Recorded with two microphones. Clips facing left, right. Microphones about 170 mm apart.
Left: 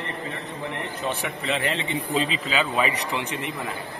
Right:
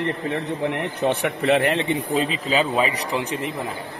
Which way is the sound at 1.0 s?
65° right (ahead or behind).